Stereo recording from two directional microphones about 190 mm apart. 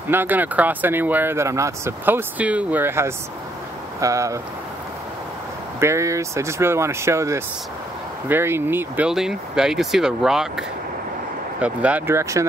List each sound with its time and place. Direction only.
0.1 s speech: 10° right (ahead or behind)
5.8 s speech: 15° right (ahead or behind)
11.6 s speech: 5° right (ahead or behind)